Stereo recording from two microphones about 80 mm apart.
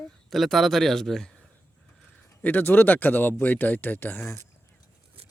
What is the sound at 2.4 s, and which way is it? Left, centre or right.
Speech, left.